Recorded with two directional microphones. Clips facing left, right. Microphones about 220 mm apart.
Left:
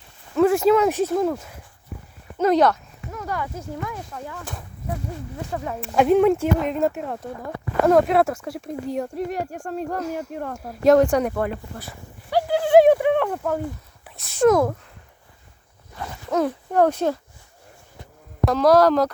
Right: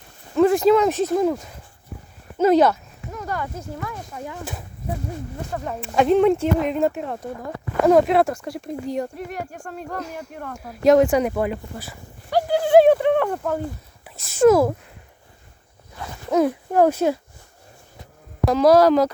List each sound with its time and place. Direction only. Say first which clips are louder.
0.3 s speech: right 1 dB; 5° left (ahead or behind)
4.1 s speech: right 1 dB; 10° right (ahead or behind)
5.5 s speech: left 1 dB; 5° left (ahead or behind)
9.1 s speech: left 5 dB; 35° left (ahead or behind)
9.9 s speech: left 4 dB; 5° left (ahead or behind)
12.5 s a sound: even; 5° left (ahead or behind)
14.2 s speech: right 2 dB; centre (ahead or behind)
16.3 s speech: right 3 dB; 10° right (ahead or behind)
18.5 s speech: right 2 dB; 5° right (ahead or behind)